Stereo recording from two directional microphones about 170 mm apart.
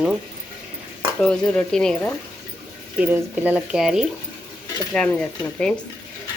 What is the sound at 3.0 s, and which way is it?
Speech, 10° right (ahead or behind).